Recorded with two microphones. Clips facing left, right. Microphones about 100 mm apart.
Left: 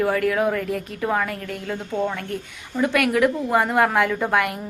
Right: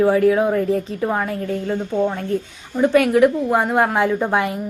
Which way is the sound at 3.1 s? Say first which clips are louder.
Right 4 dB; 20° right (ahead or behind).